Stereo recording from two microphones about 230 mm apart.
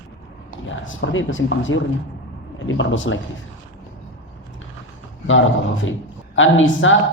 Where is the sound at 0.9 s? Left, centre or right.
Left.